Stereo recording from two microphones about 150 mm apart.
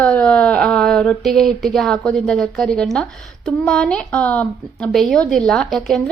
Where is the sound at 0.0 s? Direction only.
10° left (ahead or behind).